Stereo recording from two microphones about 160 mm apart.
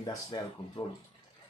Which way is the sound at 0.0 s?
25° left (ahead or behind).